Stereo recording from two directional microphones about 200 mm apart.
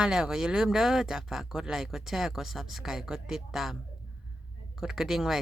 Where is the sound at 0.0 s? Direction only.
5° right (ahead or behind).